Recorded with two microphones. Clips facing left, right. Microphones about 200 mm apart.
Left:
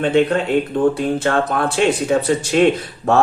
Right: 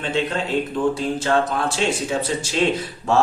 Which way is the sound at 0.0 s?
55° left (ahead or behind).